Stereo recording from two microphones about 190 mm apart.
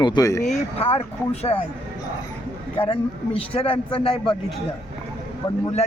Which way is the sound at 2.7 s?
25° left (ahead or behind).